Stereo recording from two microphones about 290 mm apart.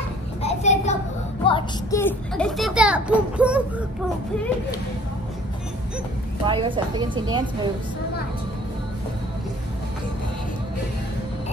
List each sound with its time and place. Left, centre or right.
0.4 s a sound: left
1.5 s a child's voice: centre
6.4 s a woman's voice: centre